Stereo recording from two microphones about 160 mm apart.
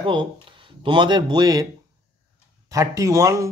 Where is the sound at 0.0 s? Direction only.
30° right (ahead or behind).